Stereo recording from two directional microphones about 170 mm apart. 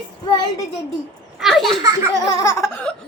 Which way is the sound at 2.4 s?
15° left (ahead or behind).